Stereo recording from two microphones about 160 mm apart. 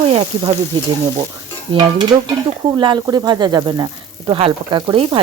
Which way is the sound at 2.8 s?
25° right (ahead or behind).